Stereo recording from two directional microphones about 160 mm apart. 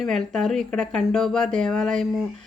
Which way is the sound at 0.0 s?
Centre (ahead or behind).